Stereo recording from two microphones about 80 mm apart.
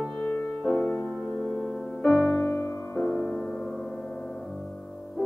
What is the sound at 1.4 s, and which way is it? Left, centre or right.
Music, centre.